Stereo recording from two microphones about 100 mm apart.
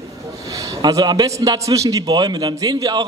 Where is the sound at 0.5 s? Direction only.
35° right (ahead or behind).